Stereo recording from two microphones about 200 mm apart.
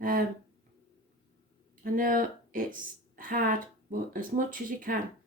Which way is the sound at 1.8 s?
45° right (ahead or behind).